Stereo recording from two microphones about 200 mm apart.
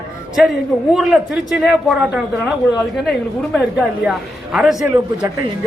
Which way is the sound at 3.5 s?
5° left (ahead or behind).